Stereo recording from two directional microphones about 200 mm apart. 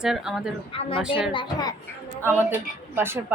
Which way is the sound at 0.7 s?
25° left (ahead or behind).